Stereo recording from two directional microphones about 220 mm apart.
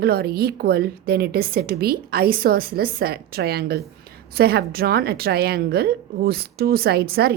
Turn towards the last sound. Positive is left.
turn(degrees=-45)  # may be behind; listen again after turning